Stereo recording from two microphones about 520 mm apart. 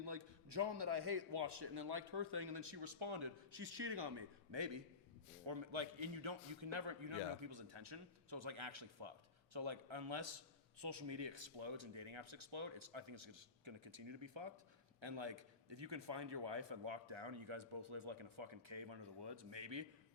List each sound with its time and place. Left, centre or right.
0.0 s a man's voice: right